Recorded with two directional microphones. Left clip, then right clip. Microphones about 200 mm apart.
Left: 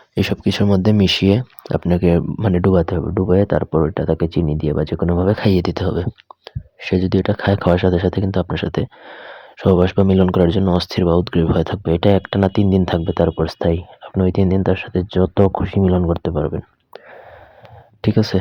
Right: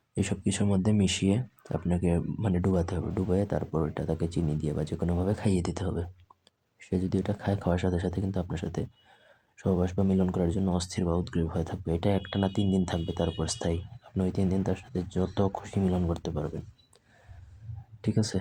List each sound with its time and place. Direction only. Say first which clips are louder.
0.1 s speech: left 12 dB; 35° left (ahead or behind)
18.0 s speech: left 13 dB; 35° left (ahead or behind)